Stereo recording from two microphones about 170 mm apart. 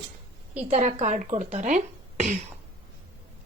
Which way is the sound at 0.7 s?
40° right (ahead or behind).